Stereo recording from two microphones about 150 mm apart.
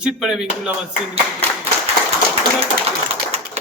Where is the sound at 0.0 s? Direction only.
5° right (ahead or behind).